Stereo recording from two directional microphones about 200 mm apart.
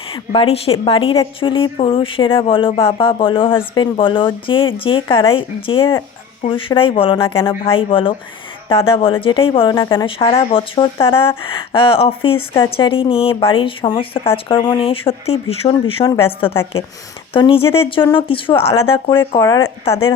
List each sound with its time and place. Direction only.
0.1 s a woman's voice: 30° left (ahead or behind)
17.3 s a woman's voice: 25° left (ahead or behind)